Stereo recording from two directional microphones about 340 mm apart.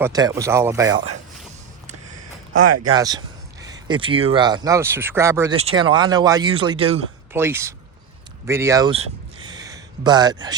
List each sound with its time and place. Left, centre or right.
0.0 s speech: centre
2.5 s speech: right
2.9 s speech: centre
9.5 s a sound: centre